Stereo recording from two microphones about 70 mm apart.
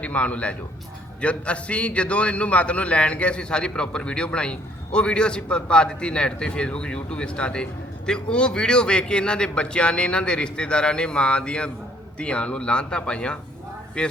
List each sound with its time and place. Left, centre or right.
0.0 s a man's voice: centre